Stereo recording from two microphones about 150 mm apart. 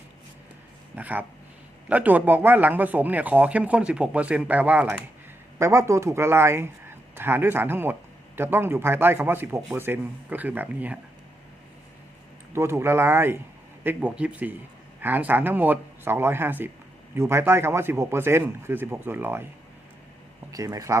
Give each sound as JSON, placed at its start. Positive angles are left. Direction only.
{"t": 0.9, "sound": "speech", "side_deg": -10}
{"t": 12.5, "sound": "speech", "side_deg": -15}
{"t": 20.5, "sound": "speech", "side_deg": -25}